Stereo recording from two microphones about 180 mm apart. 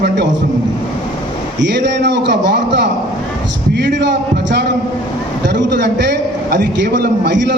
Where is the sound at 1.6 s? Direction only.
75° right (ahead or behind).